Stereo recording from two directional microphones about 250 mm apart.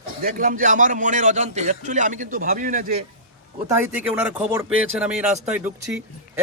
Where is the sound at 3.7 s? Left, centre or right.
Centre.